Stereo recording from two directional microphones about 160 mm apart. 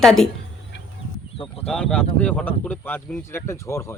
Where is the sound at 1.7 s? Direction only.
5° left (ahead or behind).